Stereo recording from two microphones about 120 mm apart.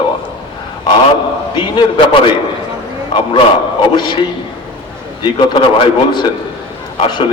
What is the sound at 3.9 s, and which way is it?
A man's voice, 40° left (ahead or behind).